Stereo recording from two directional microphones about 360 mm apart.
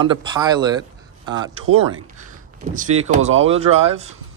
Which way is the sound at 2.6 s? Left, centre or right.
Right.